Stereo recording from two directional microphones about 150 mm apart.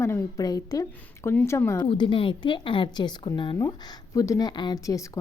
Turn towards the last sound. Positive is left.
turn(degrees=25)  # may be behind; listen again after turning